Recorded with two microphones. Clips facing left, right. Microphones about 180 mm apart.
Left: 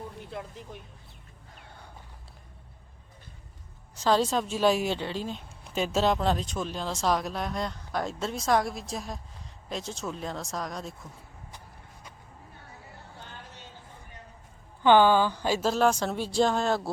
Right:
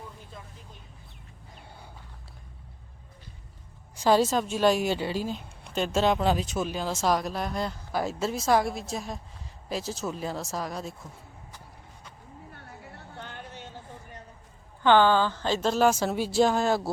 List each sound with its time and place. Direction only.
0.3 s speech: 70° left (ahead or behind)
3.9 s a woman's voice: 10° right (ahead or behind)
13.1 s a sound: 65° right (ahead or behind)
14.8 s a woman's voice: 15° left (ahead or behind); by 16.9 s 5° right (ahead or behind)